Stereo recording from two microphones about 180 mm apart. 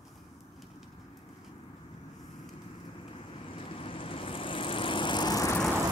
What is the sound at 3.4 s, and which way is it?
Vehicle, 30° left (ahead or behind).